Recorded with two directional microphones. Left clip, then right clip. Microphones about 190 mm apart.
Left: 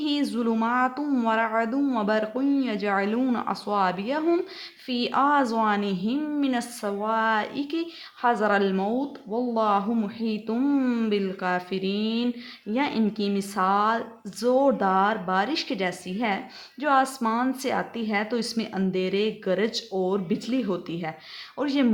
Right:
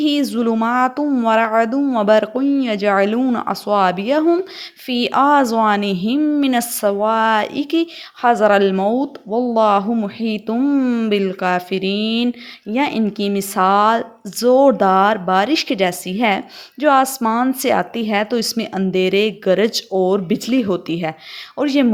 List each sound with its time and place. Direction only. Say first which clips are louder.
0.0 s a woman's voice: right 9 dB; 35° right (ahead or behind)